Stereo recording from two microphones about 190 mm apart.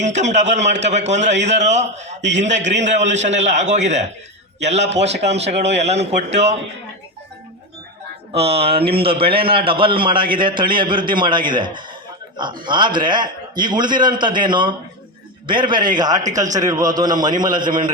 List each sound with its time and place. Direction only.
0.0 s a man's voice: 40° right (ahead or behind)
8.3 s a man's voice: 30° right (ahead or behind)